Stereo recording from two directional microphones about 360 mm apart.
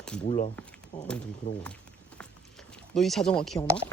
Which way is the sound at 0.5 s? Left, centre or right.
Centre.